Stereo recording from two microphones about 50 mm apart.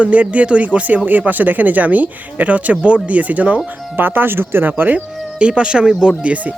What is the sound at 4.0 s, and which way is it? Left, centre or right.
Speech, right.